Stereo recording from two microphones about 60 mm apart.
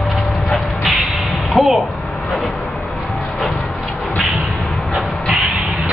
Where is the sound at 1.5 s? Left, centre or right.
Centre.